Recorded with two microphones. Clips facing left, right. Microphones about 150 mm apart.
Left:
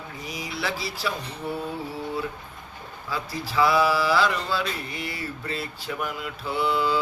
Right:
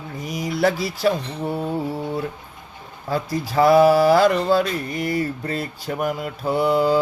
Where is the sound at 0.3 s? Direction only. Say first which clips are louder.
Right 11 dB; 45° right (ahead or behind).